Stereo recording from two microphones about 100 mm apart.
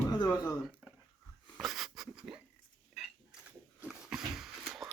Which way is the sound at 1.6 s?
Centre (ahead or behind).